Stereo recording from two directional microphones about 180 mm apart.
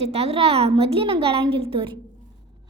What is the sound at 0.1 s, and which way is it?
A woman's voice, 35° right (ahead or behind).